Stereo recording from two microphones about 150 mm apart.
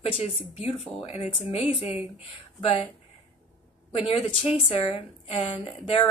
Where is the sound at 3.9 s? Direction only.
35° left (ahead or behind).